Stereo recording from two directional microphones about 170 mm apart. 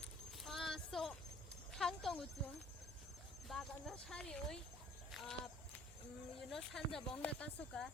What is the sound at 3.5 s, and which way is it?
Speech, centre (ahead or behind).